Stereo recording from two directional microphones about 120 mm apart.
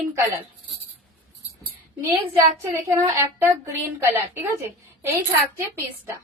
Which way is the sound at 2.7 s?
25° right (ahead or behind).